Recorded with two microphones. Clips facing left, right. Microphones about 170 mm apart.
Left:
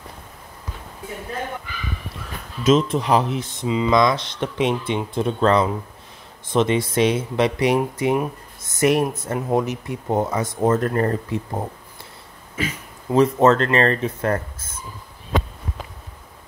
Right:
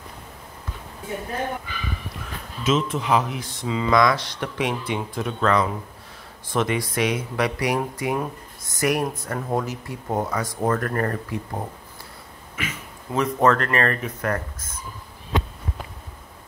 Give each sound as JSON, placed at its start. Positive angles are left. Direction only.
{"t": 2.6, "sound": "speech", "side_deg": 35}